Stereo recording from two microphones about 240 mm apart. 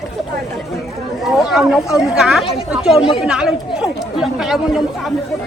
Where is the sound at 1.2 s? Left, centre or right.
Centre.